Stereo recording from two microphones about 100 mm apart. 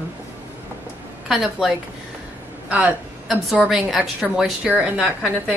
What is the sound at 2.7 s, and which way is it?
Speech, 15° right (ahead or behind).